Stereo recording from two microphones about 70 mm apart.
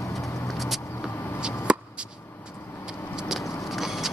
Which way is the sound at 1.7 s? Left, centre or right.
Centre.